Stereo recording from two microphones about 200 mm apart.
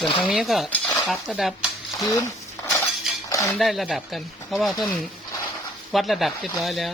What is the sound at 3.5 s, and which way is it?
Speech, centre (ahead or behind).